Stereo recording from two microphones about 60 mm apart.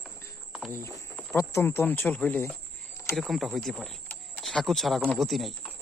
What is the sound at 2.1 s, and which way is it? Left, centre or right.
Speech, left.